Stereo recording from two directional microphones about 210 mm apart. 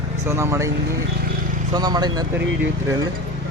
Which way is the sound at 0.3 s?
15° right (ahead or behind).